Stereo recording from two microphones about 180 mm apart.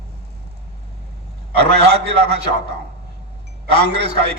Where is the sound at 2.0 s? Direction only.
65° right (ahead or behind).